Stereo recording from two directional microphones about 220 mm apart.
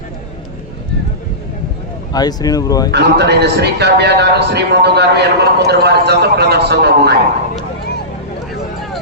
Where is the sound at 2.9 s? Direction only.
50° right (ahead or behind).